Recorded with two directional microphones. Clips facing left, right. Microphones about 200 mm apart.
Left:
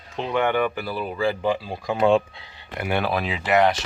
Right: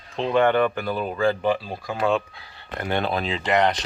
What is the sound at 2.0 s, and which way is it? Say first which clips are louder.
Speech: left 4 dB; 25° left (ahead or behind).